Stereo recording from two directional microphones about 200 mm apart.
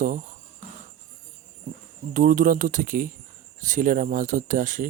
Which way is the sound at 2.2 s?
40° right (ahead or behind).